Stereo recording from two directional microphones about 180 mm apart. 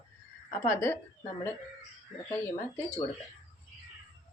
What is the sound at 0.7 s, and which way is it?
Speech, 15° left (ahead or behind).